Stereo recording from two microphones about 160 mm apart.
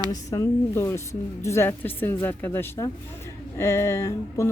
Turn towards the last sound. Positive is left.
turn(degrees=15)  # may be behind; listen again after turning